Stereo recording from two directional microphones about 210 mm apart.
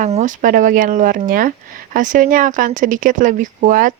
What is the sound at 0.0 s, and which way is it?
Speech, 35° right (ahead or behind).